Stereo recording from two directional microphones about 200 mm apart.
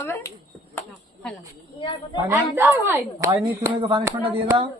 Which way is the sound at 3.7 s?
25° right (ahead or behind).